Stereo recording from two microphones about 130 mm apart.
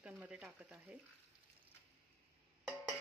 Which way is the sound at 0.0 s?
10° right (ahead or behind).